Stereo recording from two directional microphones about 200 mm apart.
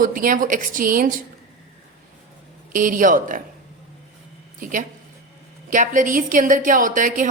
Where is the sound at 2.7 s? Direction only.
40° right (ahead or behind).